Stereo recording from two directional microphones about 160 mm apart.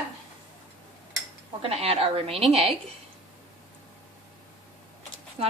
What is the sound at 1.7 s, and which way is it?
Speech, 40° right (ahead or behind).